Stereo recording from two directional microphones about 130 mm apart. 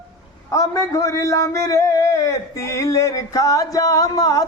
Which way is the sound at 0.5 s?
25° left (ahead or behind).